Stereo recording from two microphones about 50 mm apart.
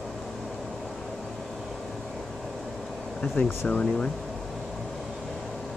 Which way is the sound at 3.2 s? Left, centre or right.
Left.